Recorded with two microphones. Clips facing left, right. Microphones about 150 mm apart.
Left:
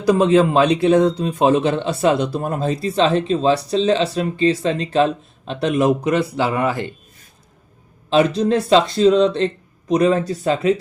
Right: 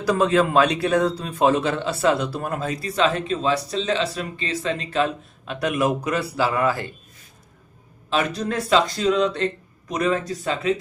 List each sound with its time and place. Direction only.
0.0 s a man's voice: 20° left (ahead or behind)
8.1 s a man's voice: 30° left (ahead or behind)